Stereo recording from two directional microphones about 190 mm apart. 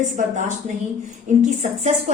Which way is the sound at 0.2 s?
40° right (ahead or behind).